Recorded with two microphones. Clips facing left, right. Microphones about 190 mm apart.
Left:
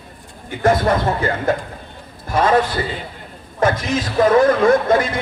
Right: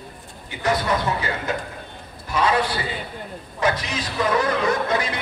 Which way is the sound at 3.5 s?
50° left (ahead or behind).